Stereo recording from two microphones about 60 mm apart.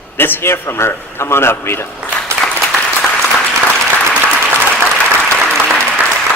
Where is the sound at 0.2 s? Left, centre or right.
Left.